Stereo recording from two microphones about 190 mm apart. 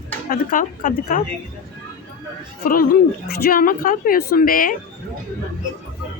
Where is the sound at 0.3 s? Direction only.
45° left (ahead or behind).